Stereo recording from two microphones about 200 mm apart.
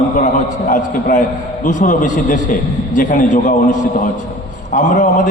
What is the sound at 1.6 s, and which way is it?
A man's voice, 40° left (ahead or behind).